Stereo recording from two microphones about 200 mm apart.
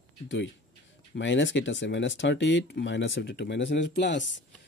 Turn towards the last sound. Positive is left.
turn(degrees=65)  # may be behind; listen again after turning